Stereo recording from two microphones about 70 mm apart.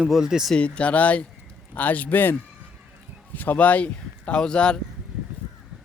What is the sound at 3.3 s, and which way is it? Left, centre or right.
Speech, left.